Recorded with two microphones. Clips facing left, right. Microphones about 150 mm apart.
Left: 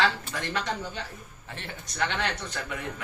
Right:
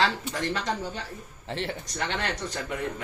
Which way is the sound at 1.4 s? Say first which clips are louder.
Right 9 dB; 30° right (ahead or behind).